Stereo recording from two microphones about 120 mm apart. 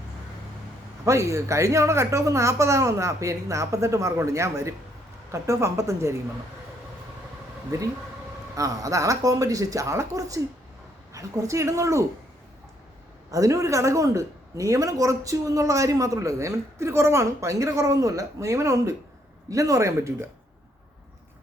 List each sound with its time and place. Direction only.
1.0 s speech: 25° right (ahead or behind)
8.5 s speech: 30° right (ahead or behind)
13.3 s speech: 30° right (ahead or behind)